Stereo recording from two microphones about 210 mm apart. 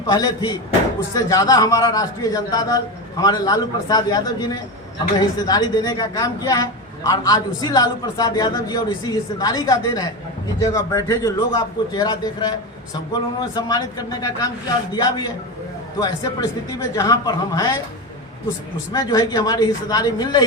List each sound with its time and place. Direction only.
0.0 s a man's voice: 20° left (ahead or behind)
18.9 s speech: 15° left (ahead or behind)